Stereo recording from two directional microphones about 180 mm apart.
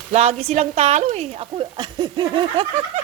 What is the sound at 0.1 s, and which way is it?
A woman's voice, 40° right (ahead or behind).